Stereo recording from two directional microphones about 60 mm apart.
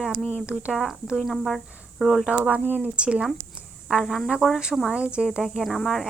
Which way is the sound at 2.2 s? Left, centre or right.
Centre.